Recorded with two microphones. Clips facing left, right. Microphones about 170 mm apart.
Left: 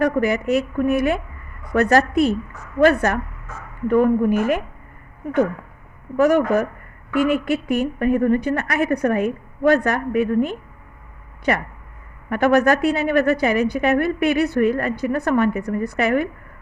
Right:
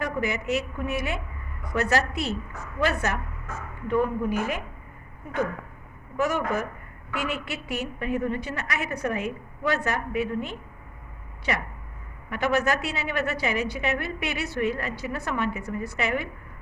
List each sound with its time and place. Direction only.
0.0 s a woman's voice: 55° left (ahead or behind)
6.2 s a woman's voice: 55° left (ahead or behind)